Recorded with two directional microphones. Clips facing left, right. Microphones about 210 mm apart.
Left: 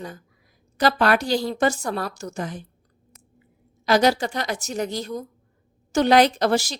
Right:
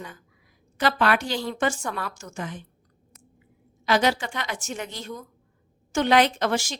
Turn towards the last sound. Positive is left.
turn(degrees=35)  # may be behind; listen again after turning